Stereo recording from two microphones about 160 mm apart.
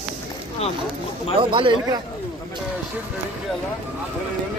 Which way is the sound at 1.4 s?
30° right (ahead or behind).